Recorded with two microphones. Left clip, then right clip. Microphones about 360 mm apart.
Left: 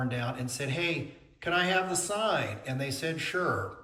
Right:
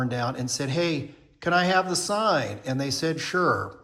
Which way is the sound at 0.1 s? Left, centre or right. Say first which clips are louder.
Right 6 dB; centre.